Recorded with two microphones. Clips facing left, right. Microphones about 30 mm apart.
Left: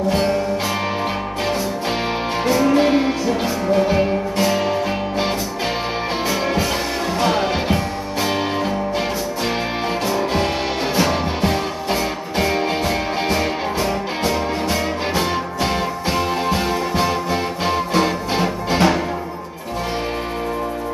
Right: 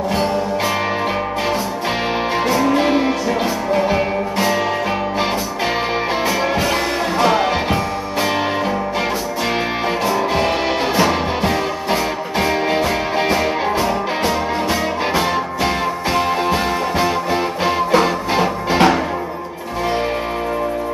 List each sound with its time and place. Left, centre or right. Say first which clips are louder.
2.6 s music: left 2 dB; centre
7.2 s music: right 3 dB; centre
10.0 s music: right 3 dB; centre